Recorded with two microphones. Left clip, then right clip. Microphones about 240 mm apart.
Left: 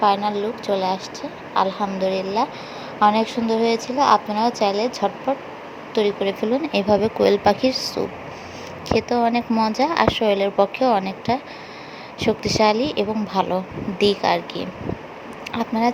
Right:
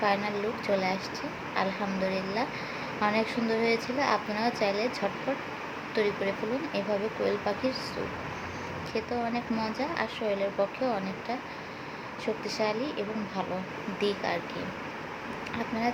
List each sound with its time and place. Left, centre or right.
0.0 s a woman's voice: left
6.7 s a woman's voice: left
8.9 s a woman's voice: left
15.5 s a woman's voice: left